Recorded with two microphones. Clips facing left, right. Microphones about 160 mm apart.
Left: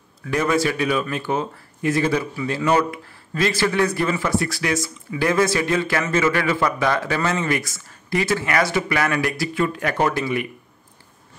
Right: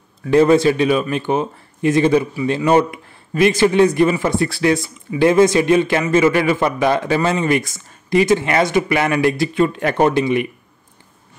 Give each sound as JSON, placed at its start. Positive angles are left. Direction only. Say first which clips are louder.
{"t": 0.3, "sound": "speech", "louder": "right 9 dB", "side_deg": -30}